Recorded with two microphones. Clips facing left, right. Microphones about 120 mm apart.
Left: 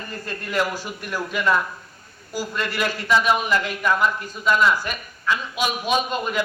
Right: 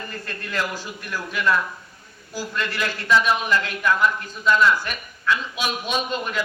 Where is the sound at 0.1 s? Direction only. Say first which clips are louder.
Left 3 dB; 15° left (ahead or behind).